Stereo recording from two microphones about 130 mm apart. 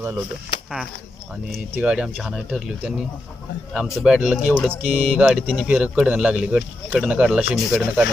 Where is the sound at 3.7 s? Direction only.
5° right (ahead or behind).